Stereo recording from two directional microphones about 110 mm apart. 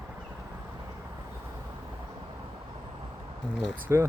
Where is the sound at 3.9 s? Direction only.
25° right (ahead or behind).